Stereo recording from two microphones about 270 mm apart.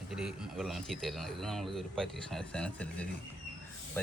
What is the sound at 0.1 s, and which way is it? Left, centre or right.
Speech, centre.